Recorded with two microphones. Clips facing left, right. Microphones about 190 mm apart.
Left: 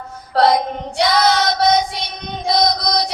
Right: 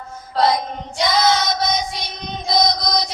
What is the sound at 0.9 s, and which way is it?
Child singing, 65° left (ahead or behind).